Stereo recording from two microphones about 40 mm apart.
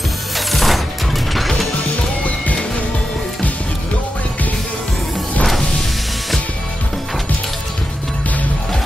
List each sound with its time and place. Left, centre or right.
0.5 s mechanisms: centre